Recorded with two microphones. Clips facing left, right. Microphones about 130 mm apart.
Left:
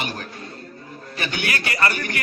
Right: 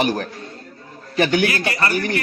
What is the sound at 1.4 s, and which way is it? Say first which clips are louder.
Speech: right 3 dB; 25° right (ahead or behind).